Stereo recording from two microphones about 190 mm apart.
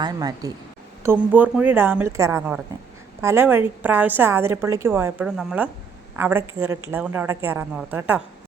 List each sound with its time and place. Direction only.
0.0 s speech: 20° right (ahead or behind)
1.0 s a woman's voice: 10° right (ahead or behind)